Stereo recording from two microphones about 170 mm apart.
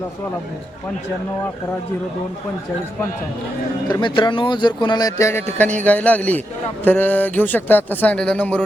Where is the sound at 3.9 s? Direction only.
30° left (ahead or behind).